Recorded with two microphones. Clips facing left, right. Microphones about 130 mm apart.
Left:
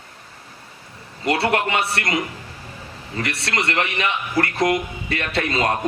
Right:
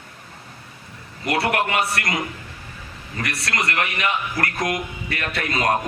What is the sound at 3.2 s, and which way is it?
A man's voice, 30° left (ahead or behind).